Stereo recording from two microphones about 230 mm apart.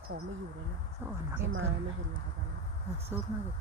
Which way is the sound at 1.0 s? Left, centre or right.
Centre.